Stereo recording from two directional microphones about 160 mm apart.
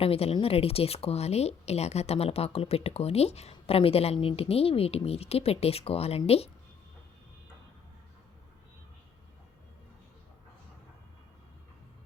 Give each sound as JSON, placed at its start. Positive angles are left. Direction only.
{"t": 0.0, "sound": "speech", "side_deg": 40}